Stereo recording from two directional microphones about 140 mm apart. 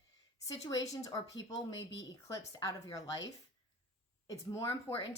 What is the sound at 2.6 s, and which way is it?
Speech, 25° left (ahead or behind).